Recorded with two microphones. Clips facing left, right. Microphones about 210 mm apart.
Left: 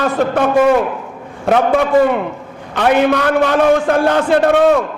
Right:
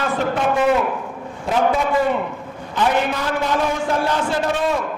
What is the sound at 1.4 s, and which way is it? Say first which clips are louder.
A man's voice: left 6 dB; 65° left (ahead or behind).